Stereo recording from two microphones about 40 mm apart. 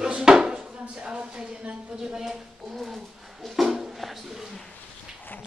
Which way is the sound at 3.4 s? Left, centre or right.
Centre.